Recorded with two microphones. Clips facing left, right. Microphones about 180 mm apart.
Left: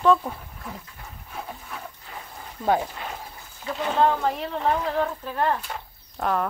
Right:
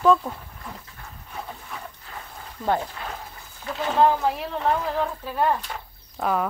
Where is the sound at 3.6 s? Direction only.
5° right (ahead or behind).